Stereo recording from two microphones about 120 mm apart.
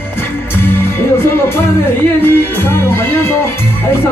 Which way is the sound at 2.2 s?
15° left (ahead or behind).